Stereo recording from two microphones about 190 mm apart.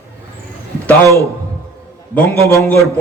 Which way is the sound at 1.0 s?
15° right (ahead or behind).